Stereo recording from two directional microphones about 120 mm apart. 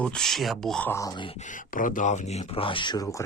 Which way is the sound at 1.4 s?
90° left.